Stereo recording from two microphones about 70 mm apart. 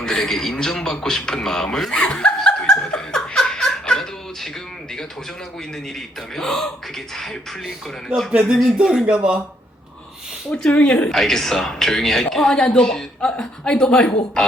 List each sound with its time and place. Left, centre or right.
0.0 s a sound: centre
6.3 s speech: centre
8.3 s speech: centre
10.5 s speech: centre
11.1 s speech: centre